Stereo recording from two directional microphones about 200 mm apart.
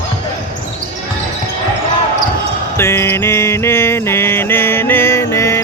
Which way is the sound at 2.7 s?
15° left (ahead or behind).